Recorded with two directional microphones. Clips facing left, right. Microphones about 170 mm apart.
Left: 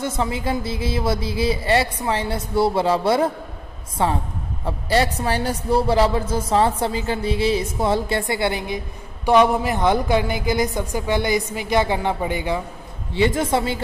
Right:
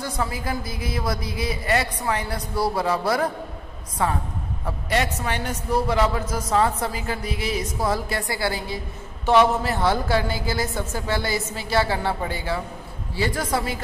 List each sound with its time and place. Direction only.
0.0 s a woman's voice: 25° left (ahead or behind)